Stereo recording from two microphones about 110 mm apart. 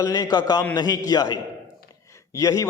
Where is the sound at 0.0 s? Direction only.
35° left (ahead or behind).